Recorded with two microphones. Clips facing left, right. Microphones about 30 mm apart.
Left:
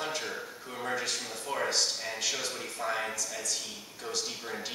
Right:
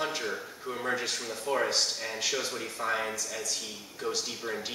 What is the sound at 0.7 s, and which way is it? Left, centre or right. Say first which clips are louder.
Speech: right 2 dB; centre.